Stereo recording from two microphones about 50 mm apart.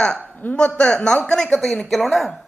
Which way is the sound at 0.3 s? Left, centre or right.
Left.